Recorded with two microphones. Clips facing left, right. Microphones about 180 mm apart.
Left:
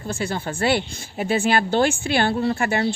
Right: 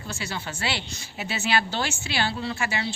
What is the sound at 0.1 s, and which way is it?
A woman's voice, 55° left (ahead or behind).